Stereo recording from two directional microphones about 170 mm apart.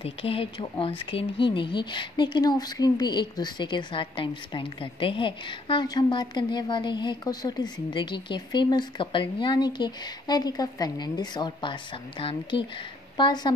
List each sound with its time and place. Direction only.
0.0 s speech: 35° left (ahead or behind)